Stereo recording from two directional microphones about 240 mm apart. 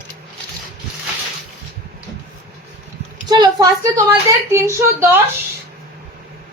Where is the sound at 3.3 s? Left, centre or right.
Centre.